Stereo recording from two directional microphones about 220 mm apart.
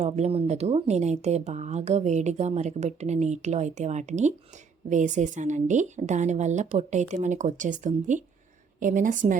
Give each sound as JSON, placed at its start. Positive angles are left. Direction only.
{"t": 0.0, "sound": "speech", "side_deg": -30}